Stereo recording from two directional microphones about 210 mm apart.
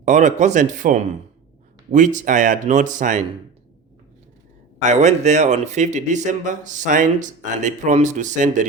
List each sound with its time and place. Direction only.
0.0 s a man's voice: 35° right (ahead or behind)
4.8 s a man's voice: 35° right (ahead or behind)